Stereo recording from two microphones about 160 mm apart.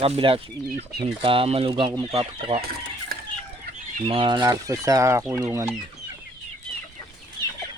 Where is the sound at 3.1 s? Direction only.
70° right (ahead or behind).